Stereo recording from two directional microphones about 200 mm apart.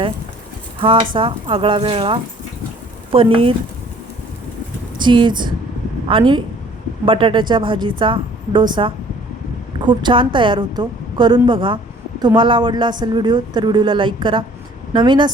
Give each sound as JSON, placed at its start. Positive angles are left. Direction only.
{"t": 0.8, "sound": "speech", "side_deg": -25}
{"t": 4.9, "sound": "speech", "side_deg": -25}